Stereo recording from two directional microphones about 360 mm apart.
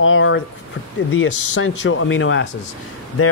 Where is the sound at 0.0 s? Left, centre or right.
Left.